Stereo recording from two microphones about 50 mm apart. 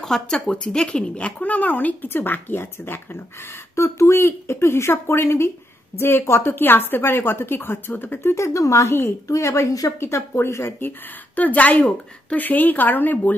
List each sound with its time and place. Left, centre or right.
0.0 s a woman's voice: centre; by 3.2 s left
3.7 s a woman's voice: left
8.4 s speech: left